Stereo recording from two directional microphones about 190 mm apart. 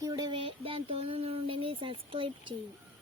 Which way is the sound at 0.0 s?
20° right (ahead or behind).